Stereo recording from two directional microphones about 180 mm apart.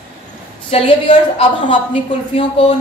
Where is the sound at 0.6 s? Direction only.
35° left (ahead or behind).